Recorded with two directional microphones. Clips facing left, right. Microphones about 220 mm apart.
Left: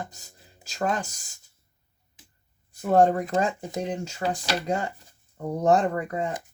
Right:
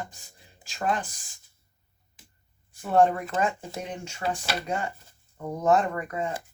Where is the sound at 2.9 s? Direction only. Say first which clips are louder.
Left 2 dB; 35° left (ahead or behind).